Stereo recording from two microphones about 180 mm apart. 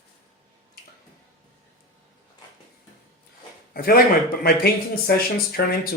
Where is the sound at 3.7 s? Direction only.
55° left (ahead or behind).